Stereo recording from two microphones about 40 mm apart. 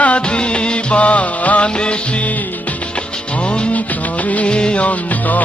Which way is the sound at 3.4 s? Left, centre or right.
Left.